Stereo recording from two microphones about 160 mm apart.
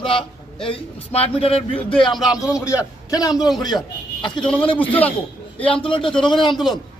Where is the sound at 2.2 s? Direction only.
20° left (ahead or behind).